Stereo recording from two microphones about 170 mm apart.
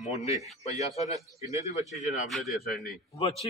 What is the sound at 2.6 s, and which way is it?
Chopping, 60° left (ahead or behind).